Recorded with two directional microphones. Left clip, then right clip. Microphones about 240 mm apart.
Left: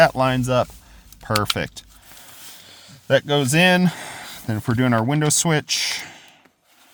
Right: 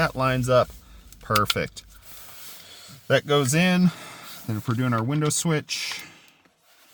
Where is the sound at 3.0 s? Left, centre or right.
Centre; by 6.3 s left.